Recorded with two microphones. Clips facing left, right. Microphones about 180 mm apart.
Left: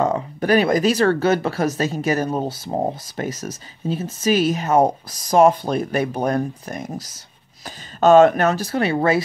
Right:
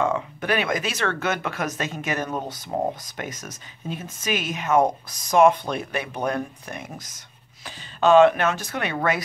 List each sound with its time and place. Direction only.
0.0 s speech: 40° left (ahead or behind)